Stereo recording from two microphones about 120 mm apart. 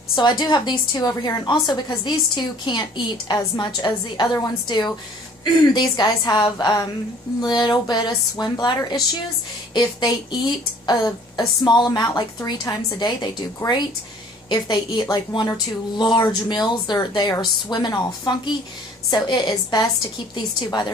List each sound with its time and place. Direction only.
0.1 s a woman's voice: 40° left (ahead or behind)